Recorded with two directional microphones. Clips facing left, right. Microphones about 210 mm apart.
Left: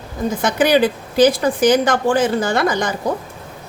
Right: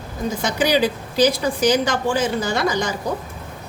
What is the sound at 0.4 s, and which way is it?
Speech, 55° left (ahead or behind).